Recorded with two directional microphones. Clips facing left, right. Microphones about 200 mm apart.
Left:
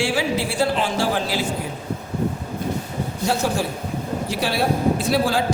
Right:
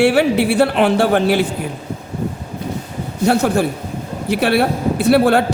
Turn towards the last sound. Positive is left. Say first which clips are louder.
# right 8 dB
turn(degrees=-60)  # may be behind; listen again after turning